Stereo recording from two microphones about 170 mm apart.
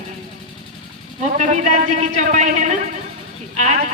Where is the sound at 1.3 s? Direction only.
45° right (ahead or behind).